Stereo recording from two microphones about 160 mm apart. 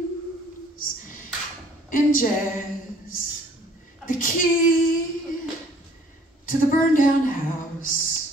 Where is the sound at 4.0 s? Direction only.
60° left (ahead or behind).